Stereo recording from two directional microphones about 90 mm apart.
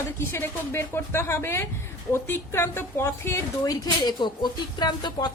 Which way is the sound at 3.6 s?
45° left (ahead or behind).